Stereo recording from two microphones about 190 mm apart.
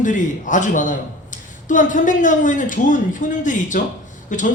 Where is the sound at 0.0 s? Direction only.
40° left (ahead or behind).